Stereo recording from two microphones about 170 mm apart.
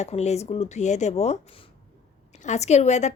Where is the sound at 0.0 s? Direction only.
40° left (ahead or behind).